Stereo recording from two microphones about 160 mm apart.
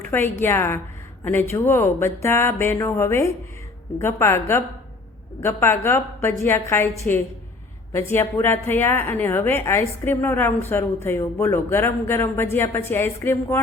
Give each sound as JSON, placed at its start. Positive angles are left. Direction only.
{"t": 0.1, "sound": "a woman's voice", "side_deg": 15}